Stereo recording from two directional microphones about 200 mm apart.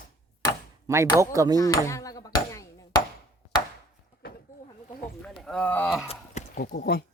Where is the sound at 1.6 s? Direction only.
15° left (ahead or behind).